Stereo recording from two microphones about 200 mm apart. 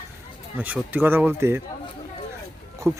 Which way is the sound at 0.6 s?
10° right (ahead or behind).